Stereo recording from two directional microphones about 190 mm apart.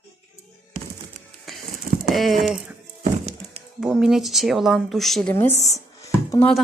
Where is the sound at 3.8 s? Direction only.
Centre (ahead or behind).